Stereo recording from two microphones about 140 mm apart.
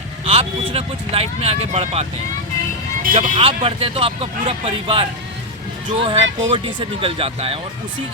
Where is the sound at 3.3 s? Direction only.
40° right (ahead or behind).